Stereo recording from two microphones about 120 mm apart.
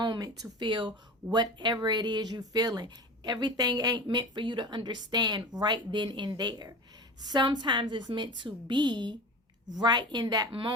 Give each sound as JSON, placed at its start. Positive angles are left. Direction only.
{"t": 0.0, "sound": "speech", "side_deg": -35}